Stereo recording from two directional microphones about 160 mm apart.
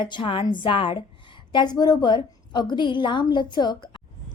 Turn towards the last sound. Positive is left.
turn(degrees=30)  # may be behind; listen again after turning